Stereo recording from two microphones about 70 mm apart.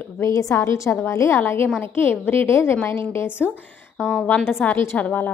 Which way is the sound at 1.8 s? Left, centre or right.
Left.